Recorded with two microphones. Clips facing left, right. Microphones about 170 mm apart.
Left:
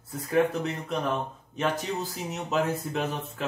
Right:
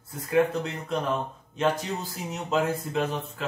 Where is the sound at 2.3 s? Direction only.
5° left (ahead or behind).